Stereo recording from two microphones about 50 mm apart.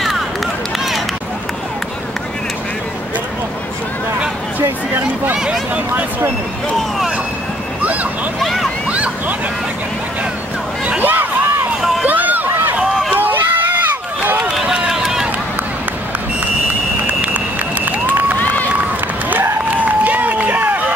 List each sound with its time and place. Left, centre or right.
0.7 s run: centre
4.6 s a sound: right
7.8 s a sound: right
8.4 s vehicle: centre
11.0 s a sound: right
13.2 s run: right
14.5 s run: centre
17.0 s run: right
18.4 s run: left
19.8 s run: right